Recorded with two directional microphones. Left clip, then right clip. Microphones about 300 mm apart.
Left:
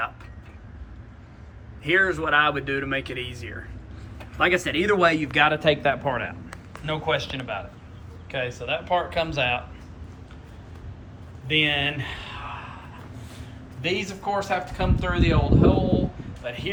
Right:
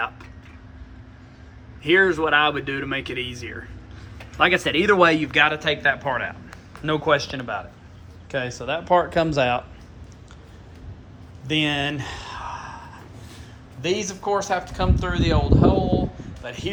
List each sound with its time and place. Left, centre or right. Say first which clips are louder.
1.8 s speech: right 3 dB; centre
4.4 s a man's voice: right 3 dB; centre
8.9 s speech: right 7 dB; right
11.4 s speech: left 1 dB; centre
13.8 s speech: right 2 dB; centre